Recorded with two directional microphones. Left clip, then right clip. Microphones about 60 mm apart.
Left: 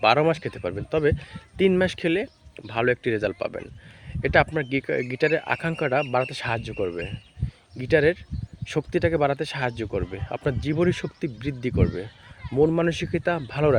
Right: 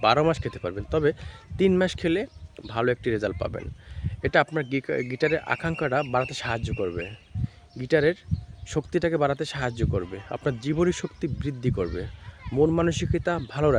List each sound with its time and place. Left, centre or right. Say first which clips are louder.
0.0 s speech: left 2 dB; right
7.8 s speech: left 2 dB; right